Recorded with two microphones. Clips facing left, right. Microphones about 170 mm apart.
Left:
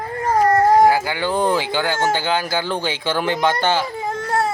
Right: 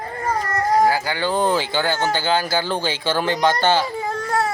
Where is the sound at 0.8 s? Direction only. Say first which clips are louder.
Left 3 dB; 25° left (ahead or behind).